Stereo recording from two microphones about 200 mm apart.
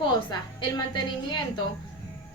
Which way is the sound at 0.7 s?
20° left (ahead or behind).